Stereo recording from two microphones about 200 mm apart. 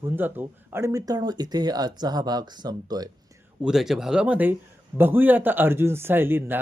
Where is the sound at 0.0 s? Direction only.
10° right (ahead or behind).